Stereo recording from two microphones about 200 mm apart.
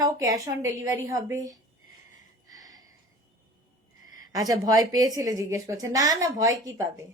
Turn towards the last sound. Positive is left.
turn(degrees=-15)  # may be behind; listen again after turning